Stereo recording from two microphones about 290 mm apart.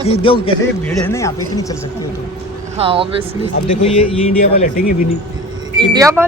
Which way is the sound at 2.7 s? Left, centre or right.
Centre.